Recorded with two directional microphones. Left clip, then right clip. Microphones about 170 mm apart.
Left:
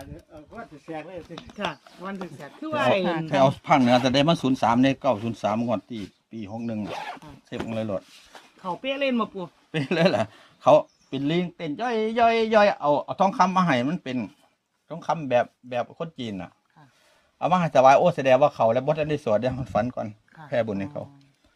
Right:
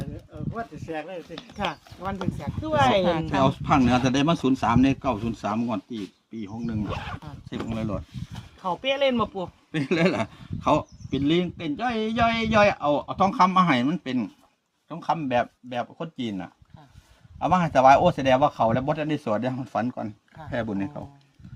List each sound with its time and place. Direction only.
0.9 s speech: 60° right (ahead or behind)
1.5 s speech: 35° right (ahead or behind)
3.0 s speech: 5° right (ahead or behind)
3.3 s speech: 55° left (ahead or behind)
8.6 s speech: 40° right (ahead or behind)
9.7 s a man's voice: 45° left (ahead or behind)